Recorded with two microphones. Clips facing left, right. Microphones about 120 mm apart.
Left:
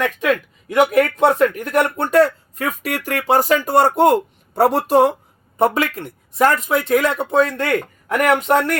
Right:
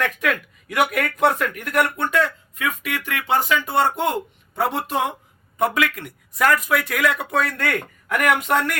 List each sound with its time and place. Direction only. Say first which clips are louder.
0.0 s a man's voice: left 5 dB; 25° left (ahead or behind)